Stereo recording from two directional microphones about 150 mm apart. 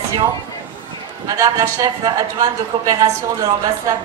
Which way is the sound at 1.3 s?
25° right (ahead or behind).